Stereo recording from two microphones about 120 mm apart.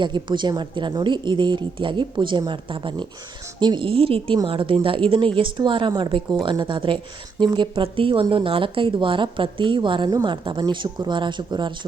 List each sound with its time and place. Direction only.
0.0 s speech: 40° right (ahead or behind)